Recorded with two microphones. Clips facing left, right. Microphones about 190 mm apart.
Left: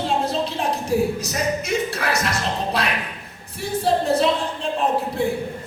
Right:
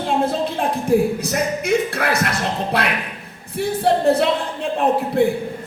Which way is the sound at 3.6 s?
60° right (ahead or behind).